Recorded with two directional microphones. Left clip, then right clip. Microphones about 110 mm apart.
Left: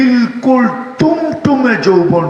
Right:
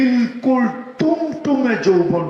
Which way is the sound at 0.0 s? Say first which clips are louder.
Left 5 dB; 30° left (ahead or behind).